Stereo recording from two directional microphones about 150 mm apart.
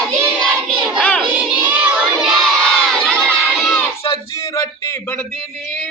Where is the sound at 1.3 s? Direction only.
10° right (ahead or behind).